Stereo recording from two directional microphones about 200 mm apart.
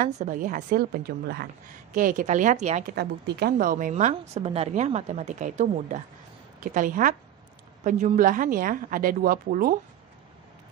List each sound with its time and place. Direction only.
0.0 s a woman's voice: 40° right (ahead or behind)
2.9 s a woman's voice: 55° right (ahead or behind)